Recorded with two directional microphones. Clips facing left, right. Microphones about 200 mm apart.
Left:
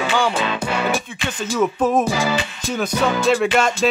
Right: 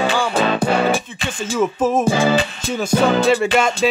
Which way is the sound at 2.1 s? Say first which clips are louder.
Right 5 dB; 30° right (ahead or behind).